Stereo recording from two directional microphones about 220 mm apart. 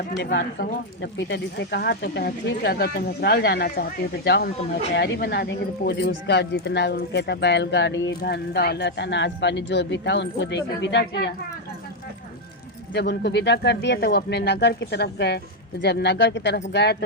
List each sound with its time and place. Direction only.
0.2 s speech: 50° left (ahead or behind)
12.9 s speech: 50° left (ahead or behind)